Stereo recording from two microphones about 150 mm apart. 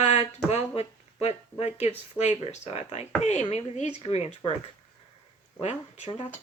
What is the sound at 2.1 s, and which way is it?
Speech, 45° left (ahead or behind).